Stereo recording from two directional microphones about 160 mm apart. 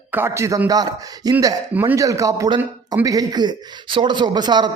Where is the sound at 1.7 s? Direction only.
10° right (ahead or behind).